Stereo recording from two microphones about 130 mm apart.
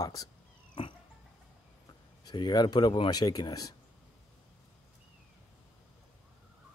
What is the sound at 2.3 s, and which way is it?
Speech, 35° left (ahead or behind).